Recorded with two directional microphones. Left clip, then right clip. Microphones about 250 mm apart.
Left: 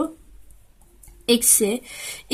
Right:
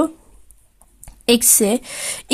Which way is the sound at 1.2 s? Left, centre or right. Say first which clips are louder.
Right 4 dB; right.